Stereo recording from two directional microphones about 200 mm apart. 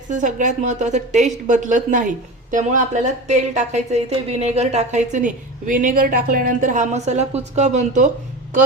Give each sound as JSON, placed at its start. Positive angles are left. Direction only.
{"t": 0.1, "sound": "a woman's voice", "side_deg": -40}